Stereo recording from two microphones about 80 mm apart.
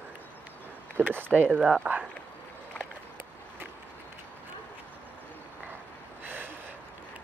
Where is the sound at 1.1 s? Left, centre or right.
Right.